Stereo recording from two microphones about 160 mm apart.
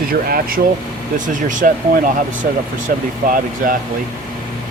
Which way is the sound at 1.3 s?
55° right (ahead or behind).